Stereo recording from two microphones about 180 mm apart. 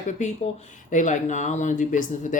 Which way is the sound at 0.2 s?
40° left (ahead or behind).